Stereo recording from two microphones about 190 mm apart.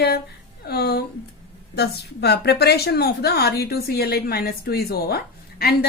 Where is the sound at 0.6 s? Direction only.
55° left (ahead or behind).